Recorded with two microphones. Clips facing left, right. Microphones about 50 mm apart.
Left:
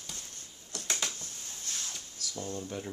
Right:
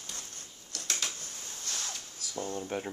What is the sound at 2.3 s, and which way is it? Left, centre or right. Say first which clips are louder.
Speech: right 3 dB; right.